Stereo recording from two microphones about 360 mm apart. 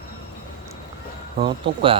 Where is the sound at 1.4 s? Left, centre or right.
Centre.